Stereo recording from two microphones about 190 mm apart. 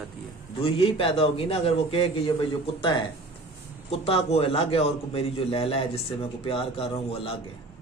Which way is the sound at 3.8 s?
30° left (ahead or behind).